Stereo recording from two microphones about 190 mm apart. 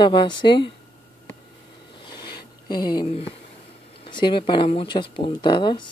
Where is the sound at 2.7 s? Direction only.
20° left (ahead or behind).